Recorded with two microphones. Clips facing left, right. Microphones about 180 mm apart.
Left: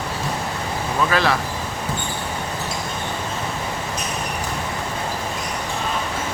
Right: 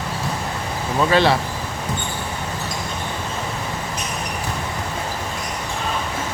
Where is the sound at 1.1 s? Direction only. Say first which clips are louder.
Right 5 dB; 30° right (ahead or behind).